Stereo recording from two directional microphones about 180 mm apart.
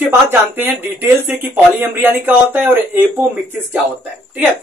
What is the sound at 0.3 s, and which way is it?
Speech, 10° right (ahead or behind).